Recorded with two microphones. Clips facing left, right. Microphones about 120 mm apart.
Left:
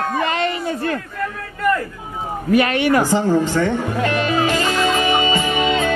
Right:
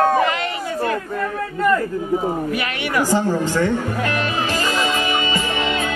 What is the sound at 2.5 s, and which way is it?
Speech, 40° left (ahead or behind).